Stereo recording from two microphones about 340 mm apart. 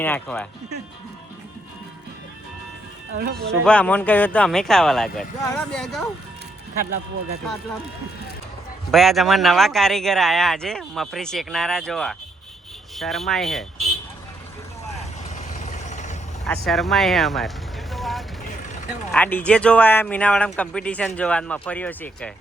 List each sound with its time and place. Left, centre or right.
0.0 s speech: centre
3.2 s speech: right
3.4 s speech: centre
8.9 s speech: centre
14.9 s vehicle: left
16.5 s speech: centre
17.9 s vehicle: centre
19.1 s speech: centre